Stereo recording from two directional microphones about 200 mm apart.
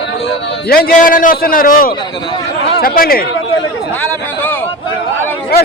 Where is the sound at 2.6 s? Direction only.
50° left (ahead or behind).